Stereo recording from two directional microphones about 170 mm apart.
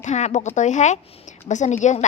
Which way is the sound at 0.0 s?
45° left (ahead or behind).